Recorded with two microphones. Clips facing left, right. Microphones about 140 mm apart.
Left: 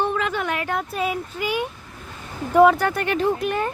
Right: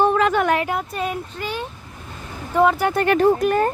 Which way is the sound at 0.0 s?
40° right (ahead or behind).